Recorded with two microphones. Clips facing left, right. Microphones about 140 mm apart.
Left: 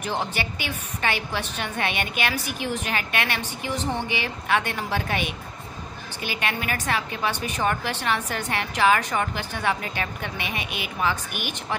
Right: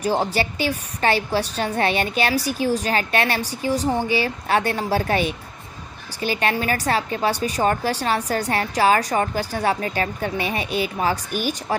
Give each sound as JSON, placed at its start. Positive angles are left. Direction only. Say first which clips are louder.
{"t": 0.0, "sound": "a woman's voice", "louder": "right 7 dB", "side_deg": -35}